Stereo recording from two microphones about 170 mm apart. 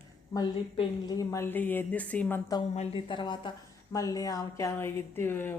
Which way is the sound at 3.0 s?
30° left (ahead or behind).